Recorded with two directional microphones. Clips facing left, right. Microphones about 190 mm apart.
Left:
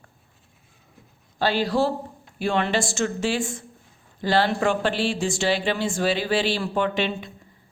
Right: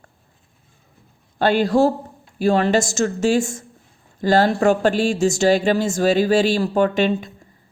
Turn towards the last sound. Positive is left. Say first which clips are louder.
# right 6 dB
turn(degrees=-45)  # may be behind; listen again after turning